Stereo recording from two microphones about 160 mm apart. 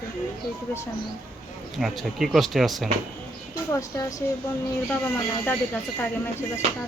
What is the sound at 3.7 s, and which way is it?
Speech, 20° left (ahead or behind).